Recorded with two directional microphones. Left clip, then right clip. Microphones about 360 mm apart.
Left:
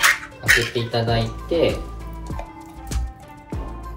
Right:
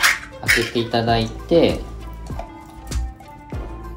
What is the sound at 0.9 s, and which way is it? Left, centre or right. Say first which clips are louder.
Speech: right 3 dB; centre.